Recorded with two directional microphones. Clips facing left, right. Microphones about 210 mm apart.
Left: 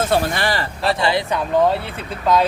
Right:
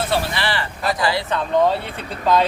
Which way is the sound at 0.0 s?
45° left (ahead or behind).